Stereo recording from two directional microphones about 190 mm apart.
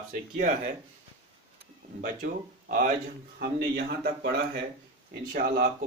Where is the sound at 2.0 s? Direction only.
45° right (ahead or behind).